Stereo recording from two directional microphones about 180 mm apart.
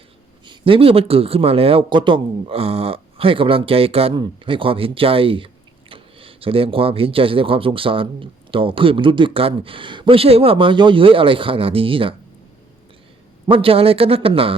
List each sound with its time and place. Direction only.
0.4 s speech: 30° right (ahead or behind)
13.5 s speech: 30° right (ahead or behind)